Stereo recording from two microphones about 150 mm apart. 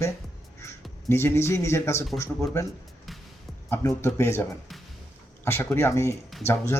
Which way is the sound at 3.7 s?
20° left (ahead or behind).